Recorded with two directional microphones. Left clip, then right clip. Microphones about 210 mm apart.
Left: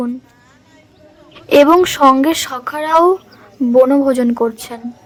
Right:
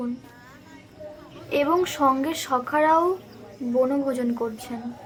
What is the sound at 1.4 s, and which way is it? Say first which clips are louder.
A woman's voice: left 14 dB; 50° left (ahead or behind).